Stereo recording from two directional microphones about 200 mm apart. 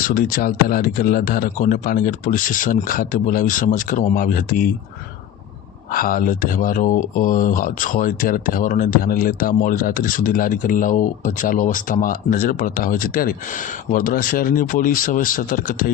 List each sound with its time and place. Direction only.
0.0 s speech: 45° left (ahead or behind)
5.9 s speech: 45° left (ahead or behind)